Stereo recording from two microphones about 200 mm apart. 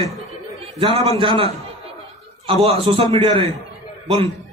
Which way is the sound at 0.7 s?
30° right (ahead or behind).